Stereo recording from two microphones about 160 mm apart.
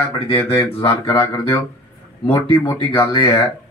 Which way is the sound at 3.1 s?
30° left (ahead or behind).